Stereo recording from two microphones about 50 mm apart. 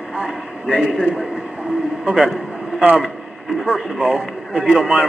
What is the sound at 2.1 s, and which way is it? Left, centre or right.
A man's voice, centre.